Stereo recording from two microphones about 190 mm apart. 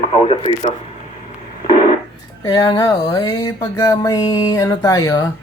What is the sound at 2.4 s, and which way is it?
Speech, 20° left (ahead or behind).